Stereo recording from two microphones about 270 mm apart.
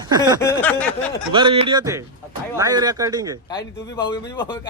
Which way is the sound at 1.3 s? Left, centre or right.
Centre.